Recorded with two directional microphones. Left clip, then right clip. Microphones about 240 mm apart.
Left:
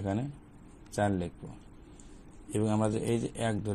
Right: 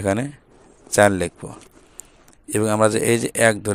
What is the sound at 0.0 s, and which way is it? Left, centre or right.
Speech, right.